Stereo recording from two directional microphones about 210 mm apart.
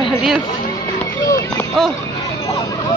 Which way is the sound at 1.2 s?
15° left (ahead or behind).